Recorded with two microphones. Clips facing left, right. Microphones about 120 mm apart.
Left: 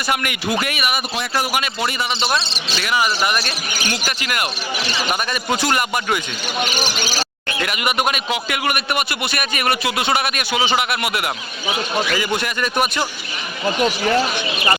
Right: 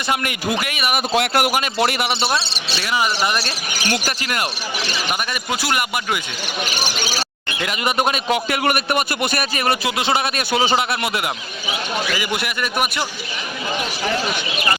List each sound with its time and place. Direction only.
0.9 s speech: 65° right (ahead or behind)
2.8 s speech: 25° right (ahead or behind)
5.3 s speech: 10° right (ahead or behind)
7.6 s speech: 25° right (ahead or behind)
9.6 s speech: 25° right (ahead or behind)
10.8 s speech: 25° right (ahead or behind)
12.1 s speech: 10° right (ahead or behind)